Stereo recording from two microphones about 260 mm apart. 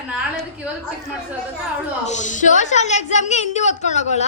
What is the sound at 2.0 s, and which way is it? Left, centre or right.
A woman's voice, left.